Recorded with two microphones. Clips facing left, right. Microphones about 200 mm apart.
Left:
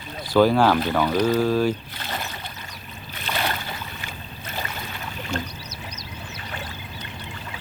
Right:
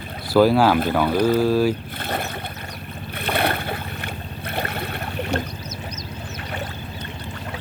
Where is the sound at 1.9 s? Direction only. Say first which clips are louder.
Right 6 dB; 55° right (ahead or behind).